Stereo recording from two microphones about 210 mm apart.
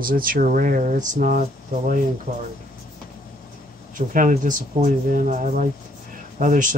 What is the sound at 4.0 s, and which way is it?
Speech, 40° right (ahead or behind).